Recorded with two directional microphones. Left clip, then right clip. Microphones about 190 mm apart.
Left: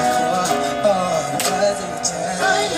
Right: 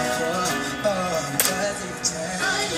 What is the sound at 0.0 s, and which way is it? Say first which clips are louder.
Music: left 6 dB; 60° left (ahead or behind).